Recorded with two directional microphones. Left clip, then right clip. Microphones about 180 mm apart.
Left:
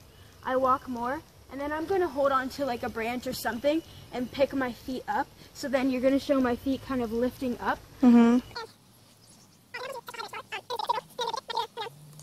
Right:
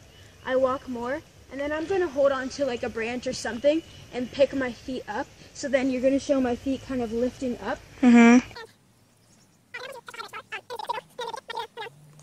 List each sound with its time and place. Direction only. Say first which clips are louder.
0.4 s speech: right 1 dB; 20° left (ahead or behind)
8.2 s speech: right 6 dB; centre (ahead or behind)
9.7 s a sound: left 1 dB; 5° right (ahead or behind)